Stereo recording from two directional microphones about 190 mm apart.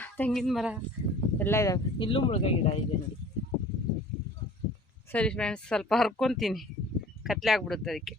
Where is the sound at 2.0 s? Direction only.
25° left (ahead or behind).